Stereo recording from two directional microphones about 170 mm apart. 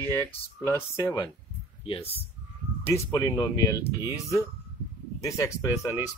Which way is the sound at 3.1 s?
20° left (ahead or behind).